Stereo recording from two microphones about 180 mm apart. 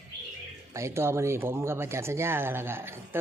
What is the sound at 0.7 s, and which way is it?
Speech, 15° right (ahead or behind).